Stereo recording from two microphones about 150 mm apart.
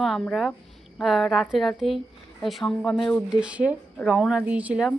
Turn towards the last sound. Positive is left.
turn(degrees=-10)  # may be behind; listen again after turning